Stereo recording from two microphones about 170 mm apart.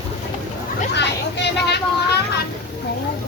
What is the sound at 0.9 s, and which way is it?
Speech, 85° left.